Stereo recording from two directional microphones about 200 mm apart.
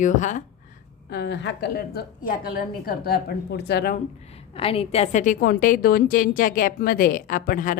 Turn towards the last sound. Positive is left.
turn(degrees=45)  # may be behind; listen again after turning